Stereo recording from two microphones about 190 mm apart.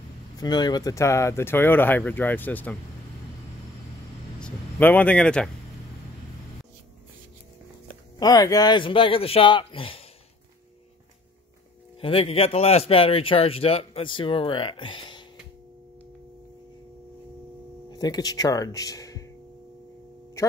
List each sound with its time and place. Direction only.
0.4 s speech: 20° left (ahead or behind)
4.4 s a man's voice: 5° left (ahead or behind)
8.2 s speech: 20° left (ahead or behind)
12.0 s speech: 30° left (ahead or behind)
17.8 s speech: 20° left (ahead or behind)
20.4 s music: 15° left (ahead or behind)